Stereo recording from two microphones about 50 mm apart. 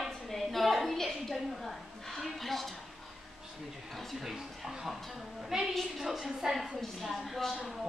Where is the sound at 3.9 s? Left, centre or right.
Centre.